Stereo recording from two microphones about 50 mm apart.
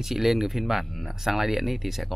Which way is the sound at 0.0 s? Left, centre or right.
Centre.